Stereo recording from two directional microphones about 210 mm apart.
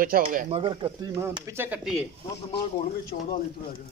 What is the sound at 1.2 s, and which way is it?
Speech, 15° right (ahead or behind).